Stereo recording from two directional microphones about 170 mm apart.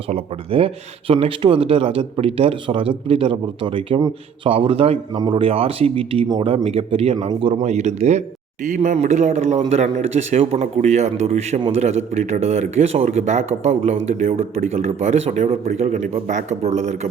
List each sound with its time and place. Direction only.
0.1 s a man's voice: 35° right (ahead or behind)